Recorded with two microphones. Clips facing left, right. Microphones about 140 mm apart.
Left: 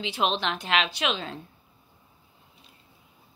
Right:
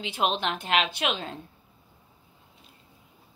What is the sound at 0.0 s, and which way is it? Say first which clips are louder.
A woman's voice: even; 50° right (ahead or behind).